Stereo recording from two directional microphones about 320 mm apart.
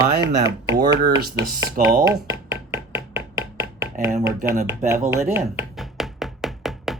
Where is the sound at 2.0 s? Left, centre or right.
Centre.